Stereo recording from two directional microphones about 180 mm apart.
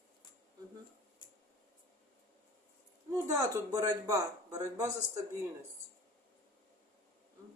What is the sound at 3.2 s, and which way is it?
Speech, 20° right (ahead or behind).